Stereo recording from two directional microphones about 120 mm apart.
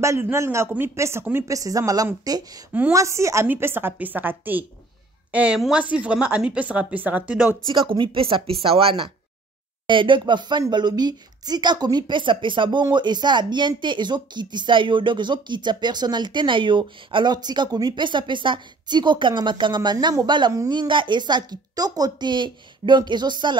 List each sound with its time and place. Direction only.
0.0 s a woman's voice: 25° right (ahead or behind)
7.9 s speech: 45° right (ahead or behind)